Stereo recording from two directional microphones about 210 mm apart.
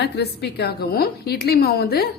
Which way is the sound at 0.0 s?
50° left (ahead or behind).